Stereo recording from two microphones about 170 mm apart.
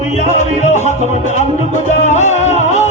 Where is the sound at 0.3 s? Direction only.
45° left (ahead or behind).